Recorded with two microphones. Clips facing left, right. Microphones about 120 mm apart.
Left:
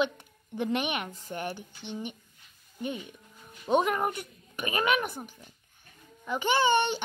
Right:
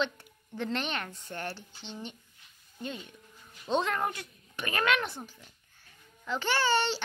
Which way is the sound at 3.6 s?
15° left (ahead or behind).